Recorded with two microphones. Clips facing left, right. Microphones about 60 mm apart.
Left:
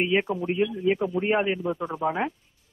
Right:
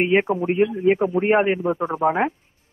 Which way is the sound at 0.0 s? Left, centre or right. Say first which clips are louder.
Right 5 dB; right.